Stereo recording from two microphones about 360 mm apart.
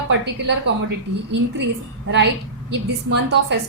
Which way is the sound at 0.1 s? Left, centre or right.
Right.